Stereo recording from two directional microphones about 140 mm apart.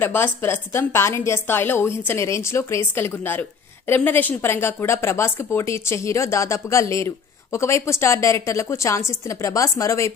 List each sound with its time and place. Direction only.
0.0 s a woman's voice: 15° left (ahead or behind)